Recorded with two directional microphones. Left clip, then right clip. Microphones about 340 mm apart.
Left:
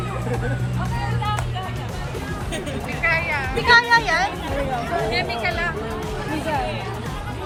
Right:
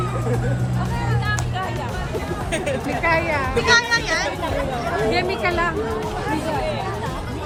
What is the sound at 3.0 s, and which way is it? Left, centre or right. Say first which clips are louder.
Speech: even; centre.